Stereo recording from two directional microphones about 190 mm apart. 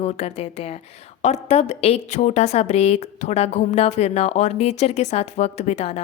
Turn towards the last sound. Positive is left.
turn(degrees=35)  # may be behind; listen again after turning